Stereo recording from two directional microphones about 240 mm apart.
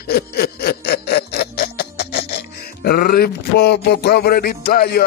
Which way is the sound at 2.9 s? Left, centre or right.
Left.